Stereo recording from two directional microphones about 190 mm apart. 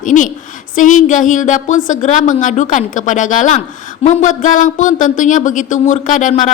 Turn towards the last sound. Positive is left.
turn(degrees=45)  # may be behind; listen again after turning